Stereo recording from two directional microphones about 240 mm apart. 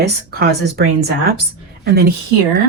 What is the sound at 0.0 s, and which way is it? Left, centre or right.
A woman's voice, right.